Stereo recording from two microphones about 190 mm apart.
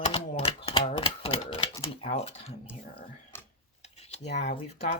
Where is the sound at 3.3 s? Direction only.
10° left (ahead or behind).